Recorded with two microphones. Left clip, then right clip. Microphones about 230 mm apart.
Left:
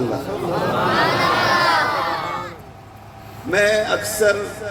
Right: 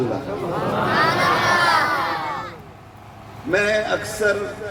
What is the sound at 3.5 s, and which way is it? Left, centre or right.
Speech, left.